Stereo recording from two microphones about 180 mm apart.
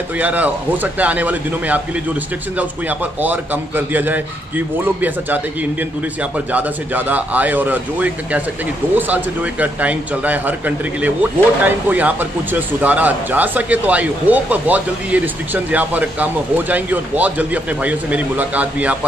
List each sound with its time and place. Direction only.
0.2 s speech: 10° right (ahead or behind)